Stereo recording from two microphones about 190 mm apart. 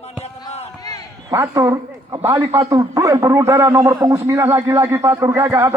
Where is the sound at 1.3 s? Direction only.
15° right (ahead or behind).